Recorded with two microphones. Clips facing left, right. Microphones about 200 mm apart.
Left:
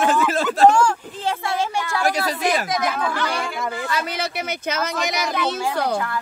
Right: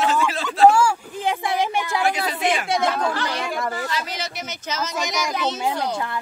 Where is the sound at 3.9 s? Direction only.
60° left (ahead or behind).